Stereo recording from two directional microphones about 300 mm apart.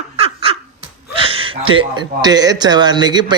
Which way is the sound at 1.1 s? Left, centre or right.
Centre.